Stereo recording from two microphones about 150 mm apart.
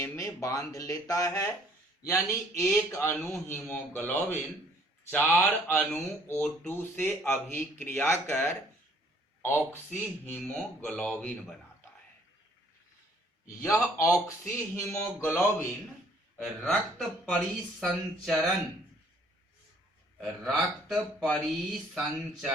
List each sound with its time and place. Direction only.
0.0 s speech: 20° left (ahead or behind); by 11.5 s 5° left (ahead or behind)
14.0 s speech: 20° left (ahead or behind)
16.4 s speech: centre (ahead or behind)
20.2 s speech: centre (ahead or behind)